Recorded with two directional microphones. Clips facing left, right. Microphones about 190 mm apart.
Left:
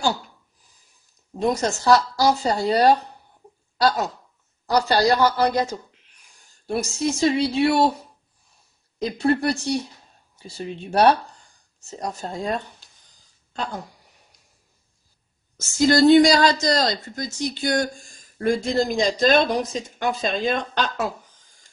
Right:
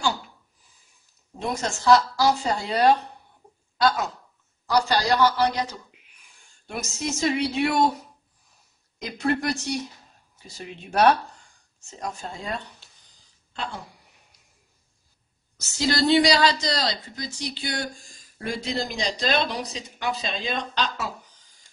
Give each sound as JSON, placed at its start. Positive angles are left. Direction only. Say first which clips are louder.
{"t": 1.4, "sound": "speech", "louder": "left 5 dB", "side_deg": 40}
{"t": 6.6, "sound": "speech", "louder": "left 7 dB", "side_deg": 35}
{"t": 9.0, "sound": "a woman's voice", "louder": "left 5 dB", "side_deg": 35}
{"t": 15.5, "sound": "speech", "louder": "left 7 dB", "side_deg": 50}